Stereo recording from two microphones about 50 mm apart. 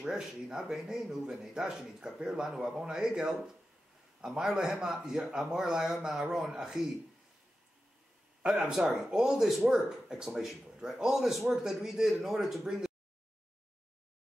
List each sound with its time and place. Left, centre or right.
0.0 s speech: centre
8.4 s speech: centre